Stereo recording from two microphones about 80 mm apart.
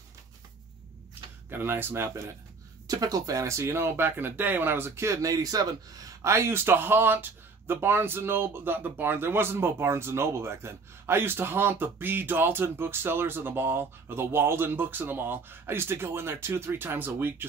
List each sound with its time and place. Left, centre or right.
1.5 s speech: right
2.9 s speech: right
6.2 s speech: right